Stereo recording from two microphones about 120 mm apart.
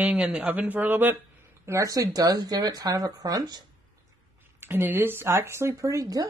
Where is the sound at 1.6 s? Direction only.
25° right (ahead or behind).